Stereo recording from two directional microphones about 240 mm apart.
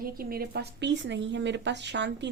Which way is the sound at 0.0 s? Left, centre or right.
Right.